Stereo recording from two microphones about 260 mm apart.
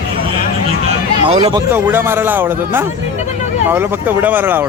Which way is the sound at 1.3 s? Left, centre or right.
Centre.